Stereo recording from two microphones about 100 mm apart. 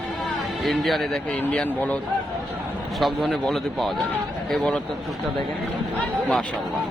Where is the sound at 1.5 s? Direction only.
10° left (ahead or behind).